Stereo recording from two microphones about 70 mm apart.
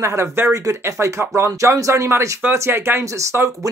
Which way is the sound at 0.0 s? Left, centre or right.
Right.